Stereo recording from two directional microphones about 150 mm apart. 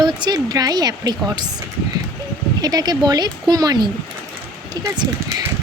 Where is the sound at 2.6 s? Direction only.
25° right (ahead or behind).